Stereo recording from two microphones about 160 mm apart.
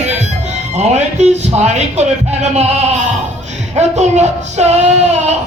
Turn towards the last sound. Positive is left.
turn(degrees=-45)  # may be behind; listen again after turning